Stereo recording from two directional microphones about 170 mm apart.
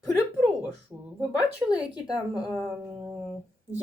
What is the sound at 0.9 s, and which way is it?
Speech, 10° right (ahead or behind).